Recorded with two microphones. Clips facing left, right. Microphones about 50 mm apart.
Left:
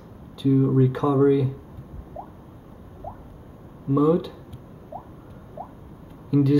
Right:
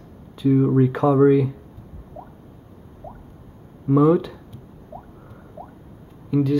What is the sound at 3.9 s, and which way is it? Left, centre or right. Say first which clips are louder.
Speech: right 3 dB; right.